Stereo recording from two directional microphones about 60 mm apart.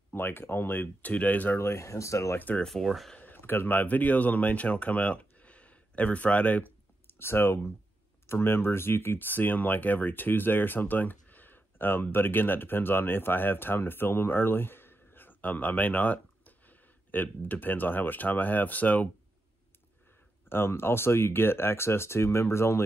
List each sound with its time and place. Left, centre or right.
0.1 s speech: left
1.6 s speech: left
2.3 s speech: left
2.6 s speech: centre
3.2 s speech: left
7.1 s speech: left
20.4 s speech: left